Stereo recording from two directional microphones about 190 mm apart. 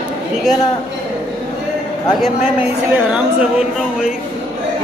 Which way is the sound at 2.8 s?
5° right (ahead or behind).